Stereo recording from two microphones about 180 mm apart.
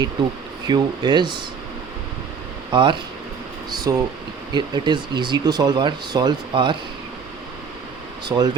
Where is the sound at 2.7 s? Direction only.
25° right (ahead or behind).